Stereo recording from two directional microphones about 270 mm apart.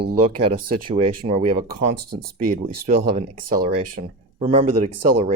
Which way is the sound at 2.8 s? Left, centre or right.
Right.